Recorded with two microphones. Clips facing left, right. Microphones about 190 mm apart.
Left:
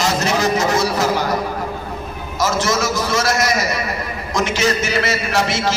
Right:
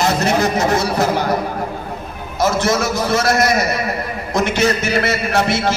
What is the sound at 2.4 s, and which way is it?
A man's voice, 55° right (ahead or behind).